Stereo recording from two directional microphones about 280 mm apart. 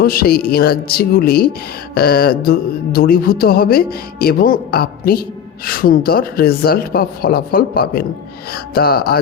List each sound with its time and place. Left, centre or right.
0.0 s music: left